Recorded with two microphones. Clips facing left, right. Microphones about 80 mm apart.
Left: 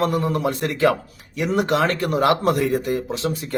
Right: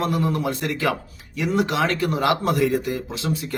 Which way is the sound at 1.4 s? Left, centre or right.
Left.